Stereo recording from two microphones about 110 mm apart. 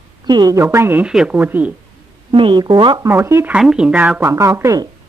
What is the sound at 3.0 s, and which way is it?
Speech, 25° right (ahead or behind).